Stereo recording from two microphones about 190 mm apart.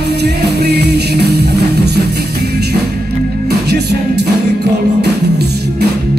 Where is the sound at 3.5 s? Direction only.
60° right (ahead or behind).